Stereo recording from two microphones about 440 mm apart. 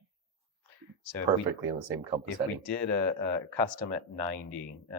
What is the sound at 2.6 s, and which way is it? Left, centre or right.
Speech, right.